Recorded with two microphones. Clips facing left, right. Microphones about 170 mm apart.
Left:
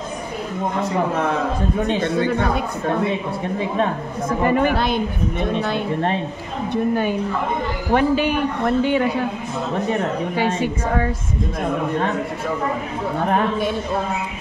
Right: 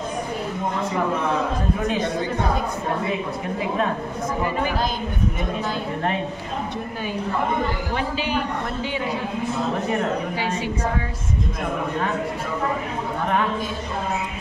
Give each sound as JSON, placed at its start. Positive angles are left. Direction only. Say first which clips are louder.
{"t": 4.5, "sound": "a woman's voice", "louder": "left 9 dB", "side_deg": 60}
{"t": 7.9, "sound": "a woman's voice", "louder": "left 7 dB", "side_deg": 55}